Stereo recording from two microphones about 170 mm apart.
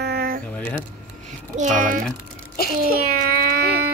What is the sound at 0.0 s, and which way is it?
Mechanisms, 65° right (ahead or behind).